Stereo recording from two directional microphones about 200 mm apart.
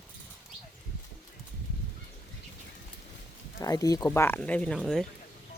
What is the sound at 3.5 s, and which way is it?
Speech, 15° left (ahead or behind).